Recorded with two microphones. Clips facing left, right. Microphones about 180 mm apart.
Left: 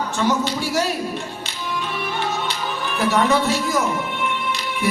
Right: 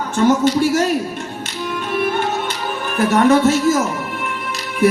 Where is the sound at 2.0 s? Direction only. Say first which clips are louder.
Right 8 dB; 50° right (ahead or behind).